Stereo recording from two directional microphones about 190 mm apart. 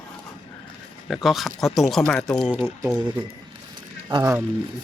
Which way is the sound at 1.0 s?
Centre (ahead or behind).